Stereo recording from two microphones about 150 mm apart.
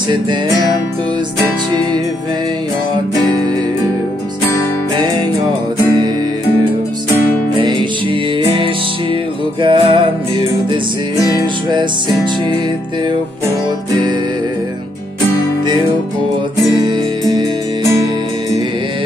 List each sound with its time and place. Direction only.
7.5 s music: 35° right (ahead or behind)